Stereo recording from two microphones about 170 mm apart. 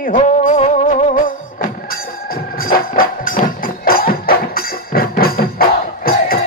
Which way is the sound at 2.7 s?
60° left (ahead or behind).